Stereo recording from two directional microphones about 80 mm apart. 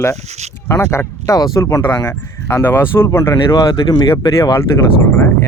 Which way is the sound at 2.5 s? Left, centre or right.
Left.